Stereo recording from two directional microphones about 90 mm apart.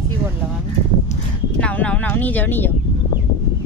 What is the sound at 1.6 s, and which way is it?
Speech, 15° left (ahead or behind).